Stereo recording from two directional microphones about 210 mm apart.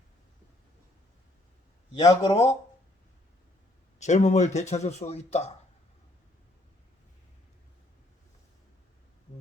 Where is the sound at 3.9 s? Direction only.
35° left (ahead or behind).